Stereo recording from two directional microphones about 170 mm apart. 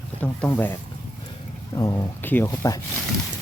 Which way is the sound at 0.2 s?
10° left (ahead or behind).